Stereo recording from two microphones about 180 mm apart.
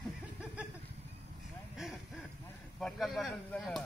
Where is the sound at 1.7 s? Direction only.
Centre (ahead or behind).